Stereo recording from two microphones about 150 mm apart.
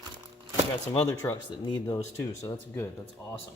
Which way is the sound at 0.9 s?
20° left (ahead or behind).